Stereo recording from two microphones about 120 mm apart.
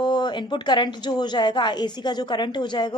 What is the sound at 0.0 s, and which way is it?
A woman's voice, 35° left (ahead or behind).